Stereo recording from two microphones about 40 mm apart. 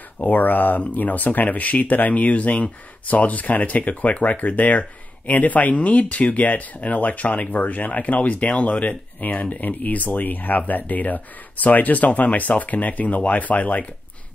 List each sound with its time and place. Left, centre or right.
0.2 s speech: left